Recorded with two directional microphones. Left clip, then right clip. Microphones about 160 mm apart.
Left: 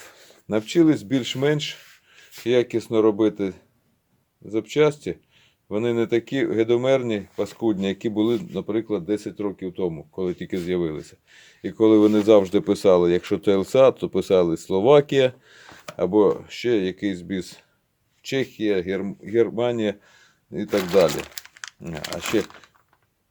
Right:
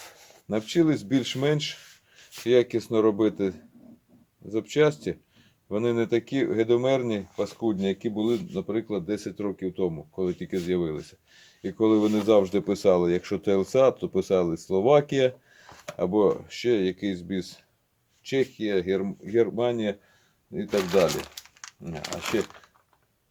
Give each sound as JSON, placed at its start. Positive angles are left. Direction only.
{"t": 0.4, "sound": "speech", "side_deg": 30}
{"t": 7.8, "sound": "speech", "side_deg": 45}
{"t": 8.5, "sound": "speech", "side_deg": 35}
{"t": 10.2, "sound": "speech", "side_deg": 35}
{"t": 16.0, "sound": "speech", "side_deg": 25}
{"t": 18.2, "sound": "speech", "side_deg": 50}
{"t": 22.0, "sound": "speech", "side_deg": 30}